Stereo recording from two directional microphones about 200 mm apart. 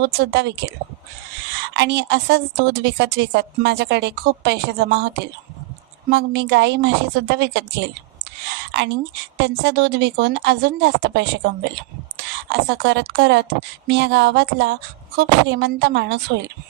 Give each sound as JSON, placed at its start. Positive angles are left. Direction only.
{"t": 0.0, "sound": "a woman's voice", "side_deg": -55}
{"t": 1.7, "sound": "a woman's voice", "side_deg": -60}
{"t": 9.4, "sound": "a woman's voice", "side_deg": -55}
{"t": 12.5, "sound": "a woman's voice", "side_deg": -60}